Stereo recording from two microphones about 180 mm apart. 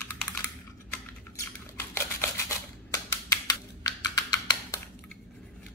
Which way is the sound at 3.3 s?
20° left (ahead or behind).